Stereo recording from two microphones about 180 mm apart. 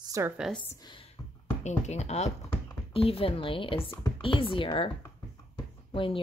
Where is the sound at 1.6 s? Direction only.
40° left (ahead or behind).